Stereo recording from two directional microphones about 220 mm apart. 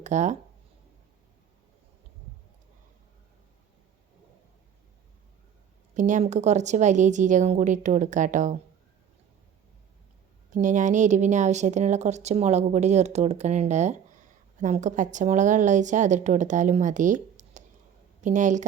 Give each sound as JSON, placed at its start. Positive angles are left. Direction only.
{"t": 0.0, "sound": "speech", "side_deg": -35}
{"t": 5.9, "sound": "speech", "side_deg": -35}
{"t": 10.5, "sound": "speech", "side_deg": -35}